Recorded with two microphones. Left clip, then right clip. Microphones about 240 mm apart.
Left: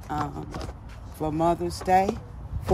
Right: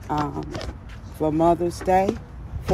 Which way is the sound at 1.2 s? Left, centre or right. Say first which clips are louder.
Right 5 dB; centre.